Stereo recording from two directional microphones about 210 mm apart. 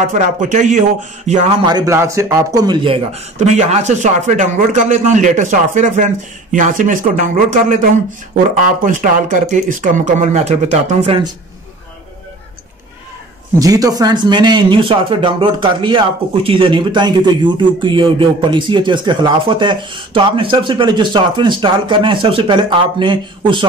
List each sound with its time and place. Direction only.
0.0 s a man's voice: 35° right (ahead or behind)
8.8 s a man's voice: 40° right (ahead or behind)
13.6 s a man's voice: 15° right (ahead or behind)